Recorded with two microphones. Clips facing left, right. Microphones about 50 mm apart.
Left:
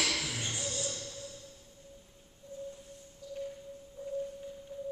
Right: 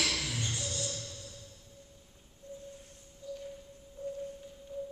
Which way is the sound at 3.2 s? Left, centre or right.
Right.